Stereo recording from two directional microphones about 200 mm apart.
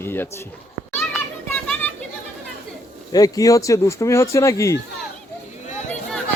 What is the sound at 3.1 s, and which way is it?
Speech, 20° left (ahead or behind).